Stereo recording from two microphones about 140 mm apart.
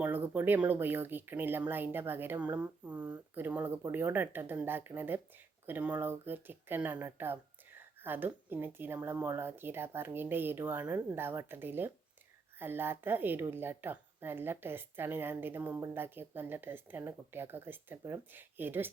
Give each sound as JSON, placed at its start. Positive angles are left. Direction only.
{"t": 0.0, "sound": "speech", "side_deg": -15}